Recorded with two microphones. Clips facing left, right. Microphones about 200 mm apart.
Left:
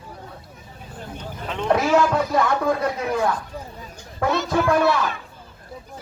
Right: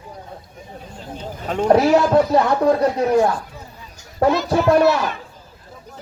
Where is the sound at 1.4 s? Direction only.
45° right (ahead or behind).